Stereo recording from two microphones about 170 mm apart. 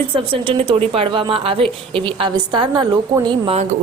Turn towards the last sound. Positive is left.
turn(degrees=-25)  # may be behind; listen again after turning